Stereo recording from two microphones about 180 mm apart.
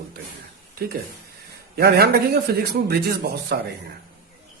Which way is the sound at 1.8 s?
65° right (ahead or behind).